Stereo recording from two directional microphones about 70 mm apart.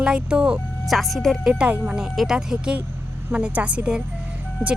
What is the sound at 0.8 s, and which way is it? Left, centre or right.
Speech, centre.